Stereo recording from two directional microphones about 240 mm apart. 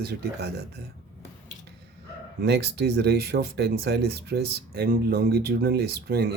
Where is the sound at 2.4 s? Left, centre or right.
Right.